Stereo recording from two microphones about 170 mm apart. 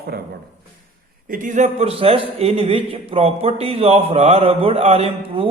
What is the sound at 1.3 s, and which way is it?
A man's voice, 50° right (ahead or behind).